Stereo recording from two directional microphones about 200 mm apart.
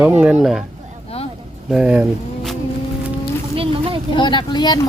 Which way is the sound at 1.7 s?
5° right (ahead or behind).